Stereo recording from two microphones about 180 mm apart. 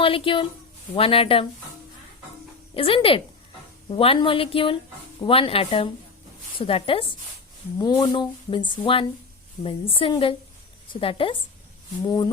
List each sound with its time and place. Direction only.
0.0 s a woman's voice: 30° left (ahead or behind)
2.7 s a woman's voice: 30° left (ahead or behind)